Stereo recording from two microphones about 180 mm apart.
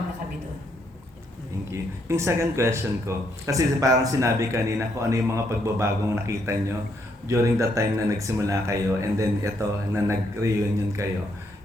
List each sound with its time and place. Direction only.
1.7 s speech: 15° right (ahead or behind)